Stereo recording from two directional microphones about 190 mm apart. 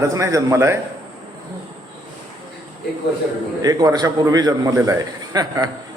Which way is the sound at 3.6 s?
20° right (ahead or behind).